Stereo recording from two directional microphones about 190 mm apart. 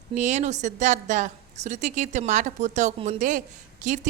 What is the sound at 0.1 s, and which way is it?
A woman's voice, 40° right (ahead or behind).